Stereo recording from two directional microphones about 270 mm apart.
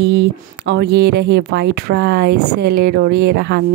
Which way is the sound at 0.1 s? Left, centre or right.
Right.